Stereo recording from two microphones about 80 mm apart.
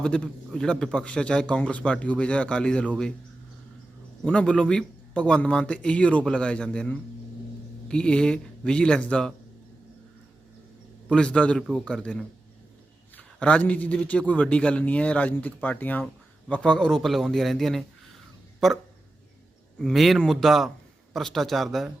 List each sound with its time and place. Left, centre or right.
0.0 s speech: centre
4.2 s speech: centre
11.1 s a man's voice: centre
19.8 s a man's voice: centre